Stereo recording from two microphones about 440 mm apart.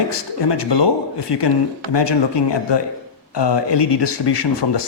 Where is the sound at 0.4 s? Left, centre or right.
Left.